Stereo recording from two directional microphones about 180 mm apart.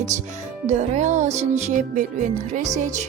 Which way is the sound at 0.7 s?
40° right (ahead or behind).